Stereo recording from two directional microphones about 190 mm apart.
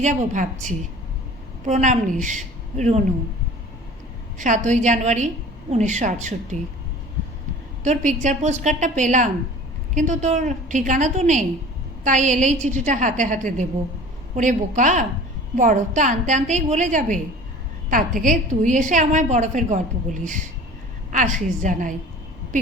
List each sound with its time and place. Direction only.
0.0 s a woman's voice: 40° right (ahead or behind)
4.4 s a woman's voice: 40° right (ahead or behind)
7.9 s a woman's voice: 40° right (ahead or behind)
18.2 s a woman's voice: 40° right (ahead or behind)
21.1 s a woman's voice: 40° right (ahead or behind)